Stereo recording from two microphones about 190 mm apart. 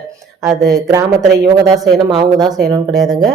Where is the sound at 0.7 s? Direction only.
15° right (ahead or behind).